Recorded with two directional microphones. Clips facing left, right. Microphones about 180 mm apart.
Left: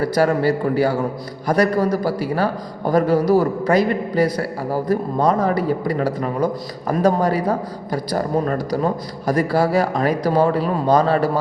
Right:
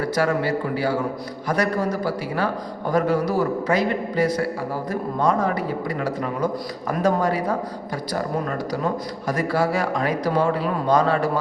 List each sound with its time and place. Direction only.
0.0 s a man's voice: 35° left (ahead or behind)